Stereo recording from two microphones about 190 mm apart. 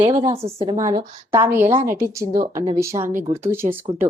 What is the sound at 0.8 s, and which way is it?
A woman's voice, 20° right (ahead or behind).